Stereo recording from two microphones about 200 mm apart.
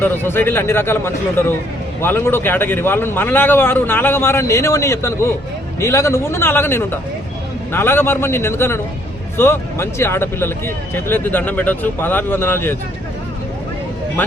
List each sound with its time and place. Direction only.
0.0 s a man's voice: 10° left (ahead or behind)
14.2 s speech: 10° left (ahead or behind)